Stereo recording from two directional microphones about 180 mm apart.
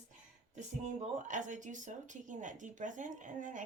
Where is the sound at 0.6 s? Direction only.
40° right (ahead or behind).